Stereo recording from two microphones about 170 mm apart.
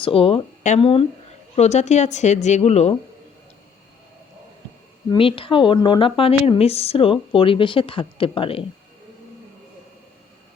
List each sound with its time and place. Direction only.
0.0 s a woman's voice: 35° left (ahead or behind)
5.1 s speech: 30° left (ahead or behind)